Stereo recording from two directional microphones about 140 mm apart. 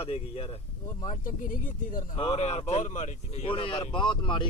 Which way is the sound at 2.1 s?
40° left (ahead or behind).